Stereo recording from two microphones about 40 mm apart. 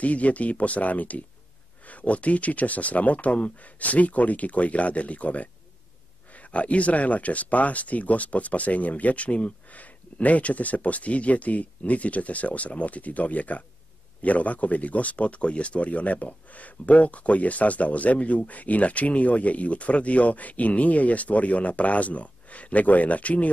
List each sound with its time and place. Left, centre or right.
0.0 s speech: left